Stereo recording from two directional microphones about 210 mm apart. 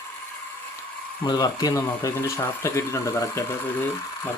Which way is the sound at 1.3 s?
20° left (ahead or behind).